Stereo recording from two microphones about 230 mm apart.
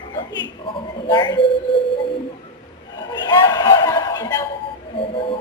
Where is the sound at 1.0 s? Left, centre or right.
Centre.